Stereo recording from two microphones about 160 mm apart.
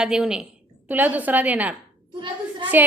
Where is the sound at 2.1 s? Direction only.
30° right (ahead or behind).